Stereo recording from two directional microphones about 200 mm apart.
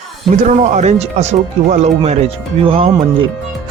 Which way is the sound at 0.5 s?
35° right (ahead or behind).